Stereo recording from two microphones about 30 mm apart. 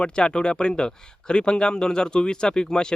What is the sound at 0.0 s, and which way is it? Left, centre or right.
A man's voice, left.